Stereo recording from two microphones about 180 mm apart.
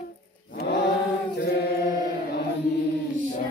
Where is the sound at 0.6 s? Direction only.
65° left (ahead or behind).